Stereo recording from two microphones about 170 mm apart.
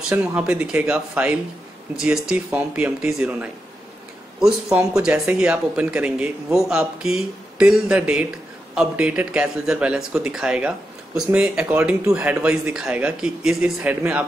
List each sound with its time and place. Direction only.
0.1 s speech: 5° right (ahead or behind)